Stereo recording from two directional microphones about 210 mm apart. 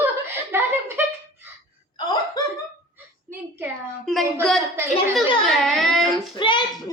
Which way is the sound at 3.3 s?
10° right (ahead or behind).